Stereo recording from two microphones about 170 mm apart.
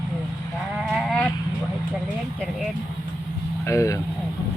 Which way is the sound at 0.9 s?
5° left (ahead or behind).